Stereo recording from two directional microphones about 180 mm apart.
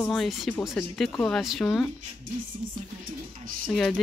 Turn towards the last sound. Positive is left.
turn(degrees=0)  # may be behind; listen again after turning